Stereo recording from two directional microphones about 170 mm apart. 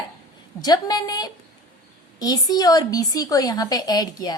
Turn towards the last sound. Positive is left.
turn(degrees=20)  # may be behind; listen again after turning